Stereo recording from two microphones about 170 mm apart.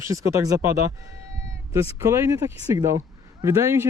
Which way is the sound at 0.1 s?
20° right (ahead or behind).